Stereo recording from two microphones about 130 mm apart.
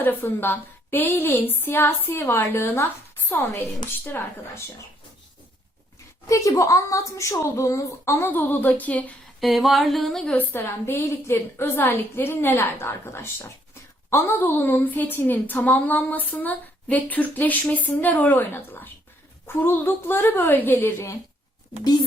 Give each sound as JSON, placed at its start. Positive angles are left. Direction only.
{"t": 0.0, "sound": "a woman's voice", "side_deg": 15}
{"t": 6.2, "sound": "speech", "side_deg": 25}
{"t": 9.4, "sound": "a sound", "side_deg": 0}
{"t": 10.3, "sound": "a woman's voice", "side_deg": 20}